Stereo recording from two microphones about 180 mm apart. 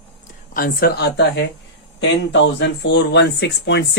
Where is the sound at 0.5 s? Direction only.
55° left (ahead or behind).